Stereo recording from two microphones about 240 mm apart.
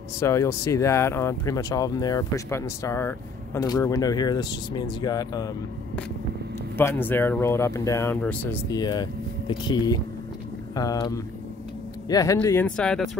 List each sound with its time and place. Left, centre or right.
0.2 s speech: centre
6.8 s speech: centre